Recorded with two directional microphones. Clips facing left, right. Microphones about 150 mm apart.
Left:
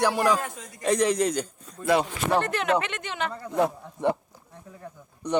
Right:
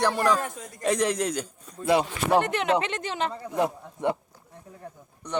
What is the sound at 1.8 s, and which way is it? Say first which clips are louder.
Speech: even; 20° right (ahead or behind).